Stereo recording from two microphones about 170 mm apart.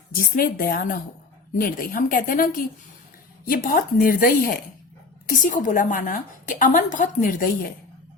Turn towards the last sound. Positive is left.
turn(degrees=55)  # may be behind; listen again after turning